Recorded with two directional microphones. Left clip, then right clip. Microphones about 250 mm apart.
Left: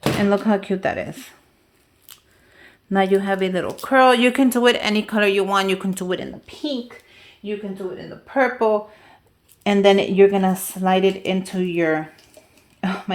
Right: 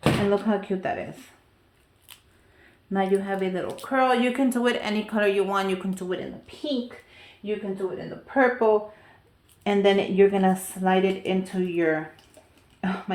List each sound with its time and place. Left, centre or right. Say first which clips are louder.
0.3 s speech: left 5 dB; left
2.6 s speech: left 7 dB; left
12.8 s cough: left 4 dB; left